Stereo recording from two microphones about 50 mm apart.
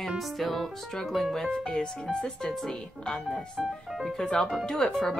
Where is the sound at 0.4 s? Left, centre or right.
Centre.